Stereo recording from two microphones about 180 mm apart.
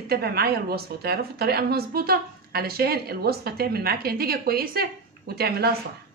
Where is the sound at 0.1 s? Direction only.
60° right (ahead or behind).